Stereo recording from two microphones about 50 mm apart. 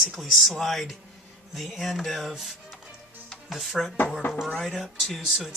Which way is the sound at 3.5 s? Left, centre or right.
Centre.